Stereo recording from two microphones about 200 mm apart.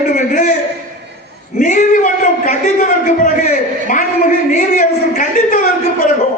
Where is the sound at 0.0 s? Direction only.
40° left (ahead or behind).